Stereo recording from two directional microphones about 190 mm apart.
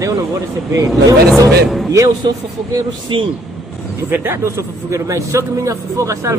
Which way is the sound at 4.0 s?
10° right (ahead or behind).